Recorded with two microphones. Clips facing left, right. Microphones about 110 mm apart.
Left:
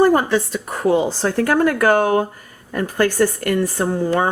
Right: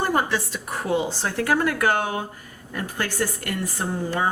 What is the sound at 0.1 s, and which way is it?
A woman's voice, 40° left (ahead or behind).